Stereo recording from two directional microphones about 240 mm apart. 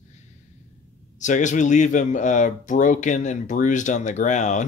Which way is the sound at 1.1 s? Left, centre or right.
Left.